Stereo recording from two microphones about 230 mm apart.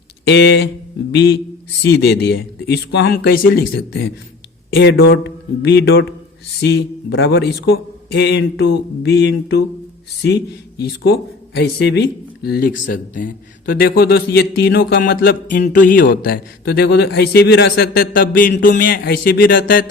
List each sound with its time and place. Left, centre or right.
0.3 s speech: left
1.8 s speech: left
4.8 s speech: left
11.5 s speech: left
13.1 s a man's voice: left